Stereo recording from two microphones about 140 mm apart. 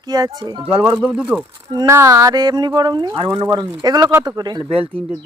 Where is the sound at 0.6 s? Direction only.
10° right (ahead or behind).